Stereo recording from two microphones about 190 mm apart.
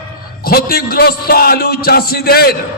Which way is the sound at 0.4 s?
55° left (ahead or behind).